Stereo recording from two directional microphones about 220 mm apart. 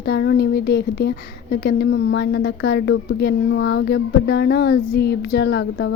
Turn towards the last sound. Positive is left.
turn(degrees=50)  # may be behind; listen again after turning